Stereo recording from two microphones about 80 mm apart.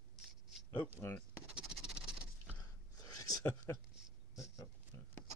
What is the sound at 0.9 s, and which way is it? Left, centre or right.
Speech, left.